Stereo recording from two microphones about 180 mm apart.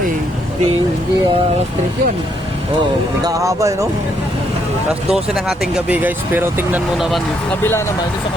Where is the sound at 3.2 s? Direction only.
15° right (ahead or behind).